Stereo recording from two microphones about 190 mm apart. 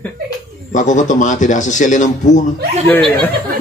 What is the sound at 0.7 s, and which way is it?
Speech, 40° left (ahead or behind).